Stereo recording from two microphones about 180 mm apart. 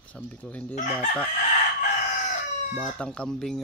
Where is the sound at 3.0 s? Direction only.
5° left (ahead or behind).